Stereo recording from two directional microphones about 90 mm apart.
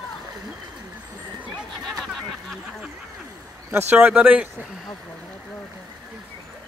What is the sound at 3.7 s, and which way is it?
Speech, 20° right (ahead or behind).